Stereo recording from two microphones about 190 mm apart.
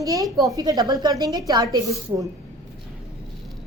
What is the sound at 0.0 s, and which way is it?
A woman's voice, 20° right (ahead or behind).